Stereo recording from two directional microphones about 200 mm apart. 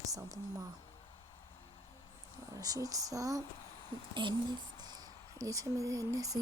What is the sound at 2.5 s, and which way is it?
Speech, 20° right (ahead or behind).